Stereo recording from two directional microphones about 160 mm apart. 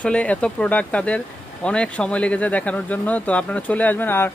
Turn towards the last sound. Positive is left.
turn(degrees=15)  # may be behind; listen again after turning